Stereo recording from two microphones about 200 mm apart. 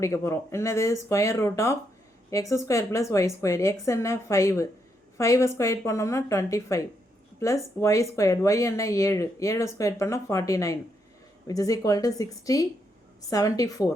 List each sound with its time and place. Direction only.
0.0 s speech: 15° left (ahead or behind)